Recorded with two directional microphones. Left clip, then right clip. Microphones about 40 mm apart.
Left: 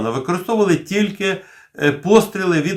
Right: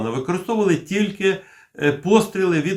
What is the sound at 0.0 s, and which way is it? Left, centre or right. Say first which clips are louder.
Speech: left 3 dB; left.